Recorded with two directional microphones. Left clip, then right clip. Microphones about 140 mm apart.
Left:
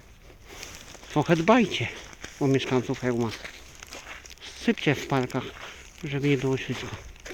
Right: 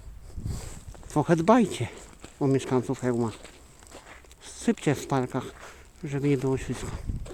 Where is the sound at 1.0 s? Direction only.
20° right (ahead or behind).